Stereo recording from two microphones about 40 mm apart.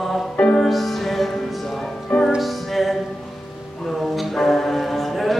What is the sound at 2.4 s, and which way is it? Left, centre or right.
Music, centre.